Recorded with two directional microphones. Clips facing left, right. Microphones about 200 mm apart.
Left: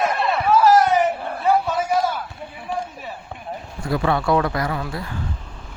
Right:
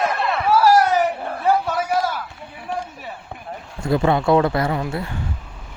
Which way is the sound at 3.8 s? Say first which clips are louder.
Right 3 dB; 25° right (ahead or behind).